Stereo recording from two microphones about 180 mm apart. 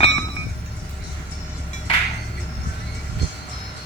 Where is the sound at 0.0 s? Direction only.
35° left (ahead or behind).